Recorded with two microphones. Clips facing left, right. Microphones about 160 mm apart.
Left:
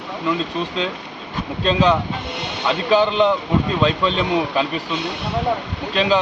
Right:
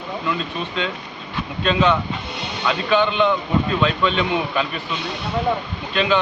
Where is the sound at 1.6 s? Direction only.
35° left (ahead or behind).